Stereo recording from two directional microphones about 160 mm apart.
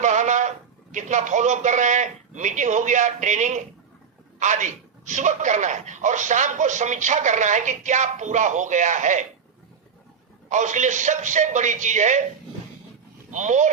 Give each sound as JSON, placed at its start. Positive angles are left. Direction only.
{"t": 0.0, "sound": "a man's voice", "side_deg": -50}
{"t": 10.5, "sound": "speech", "side_deg": -50}
{"t": 13.3, "sound": "speech", "side_deg": -50}